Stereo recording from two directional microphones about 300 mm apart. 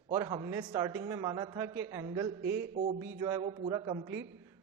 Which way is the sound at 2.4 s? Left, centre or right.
Right.